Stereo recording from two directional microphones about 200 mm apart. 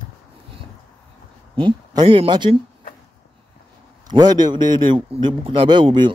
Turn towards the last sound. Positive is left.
turn(degrees=-25)  # may be behind; listen again after turning